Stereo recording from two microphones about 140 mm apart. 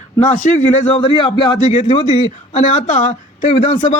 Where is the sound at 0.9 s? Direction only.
35° left (ahead or behind).